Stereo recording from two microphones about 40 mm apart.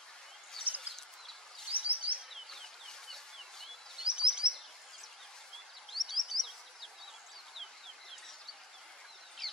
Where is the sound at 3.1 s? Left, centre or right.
Centre.